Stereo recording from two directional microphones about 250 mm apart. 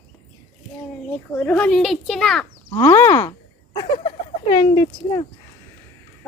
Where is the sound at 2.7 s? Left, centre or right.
Centre.